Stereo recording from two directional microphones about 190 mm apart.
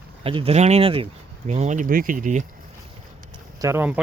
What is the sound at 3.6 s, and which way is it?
Speech, 10° right (ahead or behind).